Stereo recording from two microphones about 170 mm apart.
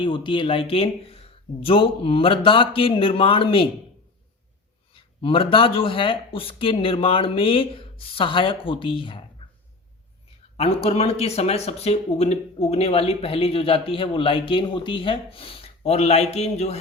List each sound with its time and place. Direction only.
0.0 s speech: 30° left (ahead or behind)
4.9 s speech: 30° left (ahead or behind)
10.6 s speech: 35° left (ahead or behind)